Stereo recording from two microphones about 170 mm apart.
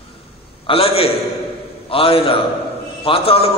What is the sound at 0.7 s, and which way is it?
A man's voice, 35° left (ahead or behind).